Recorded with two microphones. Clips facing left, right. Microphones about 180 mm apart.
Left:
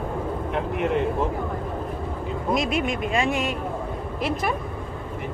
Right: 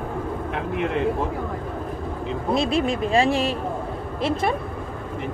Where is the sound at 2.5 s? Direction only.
30° right (ahead or behind).